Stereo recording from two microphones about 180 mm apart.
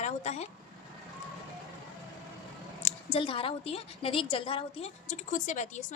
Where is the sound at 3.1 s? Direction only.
30° left (ahead or behind).